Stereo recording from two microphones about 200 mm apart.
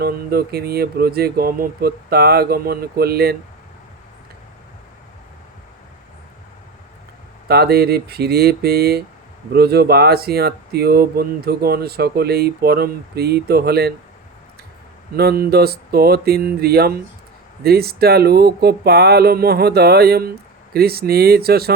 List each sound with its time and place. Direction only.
0.0 s speech: 50° right (ahead or behind)
7.4 s speech: 55° right (ahead or behind)
15.1 s speech: 50° right (ahead or behind)